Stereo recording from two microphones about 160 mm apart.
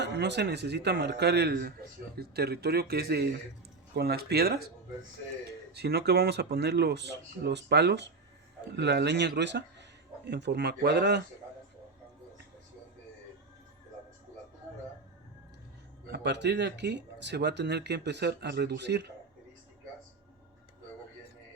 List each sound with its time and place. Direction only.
0.0 s speech: 90° right
5.7 s speech: 85° right
16.1 s speech: 90° right